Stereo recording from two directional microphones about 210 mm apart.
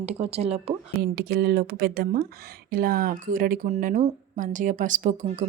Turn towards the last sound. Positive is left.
turn(degrees=-35)  # may be behind; listen again after turning